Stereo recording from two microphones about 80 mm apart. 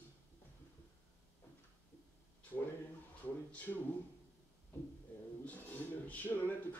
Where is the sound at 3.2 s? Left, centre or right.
Left.